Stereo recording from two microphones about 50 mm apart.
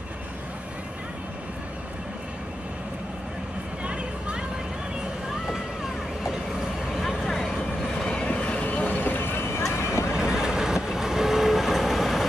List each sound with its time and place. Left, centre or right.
3.8 s a sound: right
8.0 s vehicle: centre
8.3 s vehicle: left
10.1 s train: centre